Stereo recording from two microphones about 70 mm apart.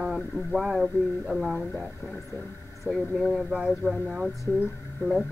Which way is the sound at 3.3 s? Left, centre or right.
Centre.